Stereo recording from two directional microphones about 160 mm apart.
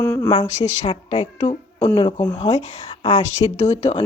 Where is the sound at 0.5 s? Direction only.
45° left (ahead or behind).